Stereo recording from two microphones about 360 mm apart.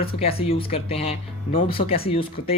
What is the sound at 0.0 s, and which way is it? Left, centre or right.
Speech, centre.